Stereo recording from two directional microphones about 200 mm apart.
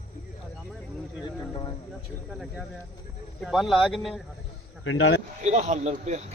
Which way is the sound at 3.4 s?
Centre (ahead or behind).